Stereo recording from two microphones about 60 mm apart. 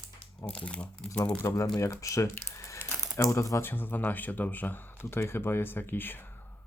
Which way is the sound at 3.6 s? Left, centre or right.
Left.